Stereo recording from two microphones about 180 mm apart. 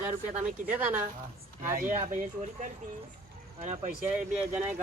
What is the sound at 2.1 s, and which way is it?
Speech, 45° right (ahead or behind).